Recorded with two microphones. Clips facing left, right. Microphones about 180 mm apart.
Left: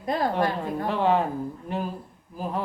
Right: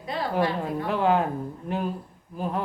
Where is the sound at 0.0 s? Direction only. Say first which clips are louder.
Left 5 dB; 45° left (ahead or behind).